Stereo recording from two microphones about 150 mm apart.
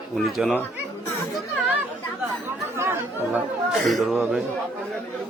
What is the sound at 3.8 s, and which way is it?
Speech, centre (ahead or behind).